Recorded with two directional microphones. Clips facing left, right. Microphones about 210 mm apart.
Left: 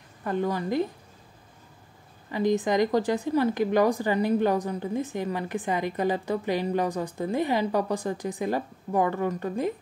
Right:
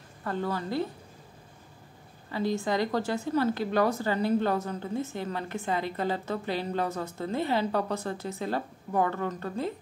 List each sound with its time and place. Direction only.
0.2 s a woman's voice: 15° left (ahead or behind)
2.3 s a woman's voice: 15° left (ahead or behind)